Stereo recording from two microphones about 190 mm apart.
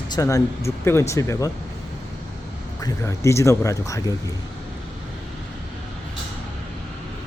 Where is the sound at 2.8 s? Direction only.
15° left (ahead or behind).